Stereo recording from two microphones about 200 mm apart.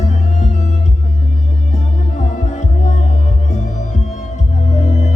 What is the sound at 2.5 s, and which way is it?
Music, 35° left (ahead or behind).